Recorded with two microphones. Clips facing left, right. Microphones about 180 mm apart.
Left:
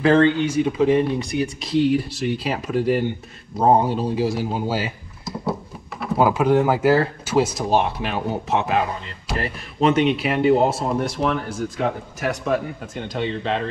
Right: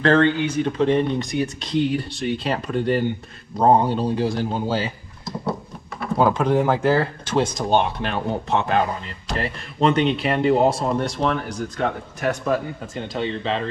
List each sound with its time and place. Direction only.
0.0 s speech: 10° left (ahead or behind)